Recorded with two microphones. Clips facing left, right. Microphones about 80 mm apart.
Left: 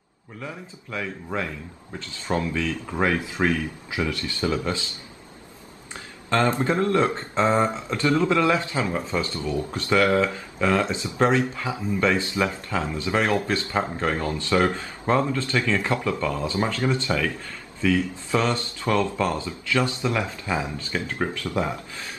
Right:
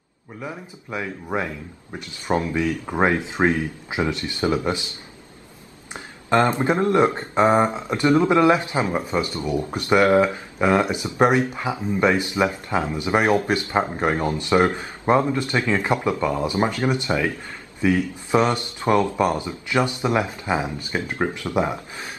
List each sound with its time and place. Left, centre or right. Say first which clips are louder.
0.4 s speech: right 3 dB; right
5.9 s speech: right 4 dB; right